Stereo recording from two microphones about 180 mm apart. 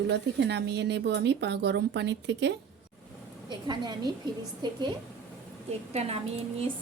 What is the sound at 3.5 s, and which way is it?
A woman's voice, 25° right (ahead or behind).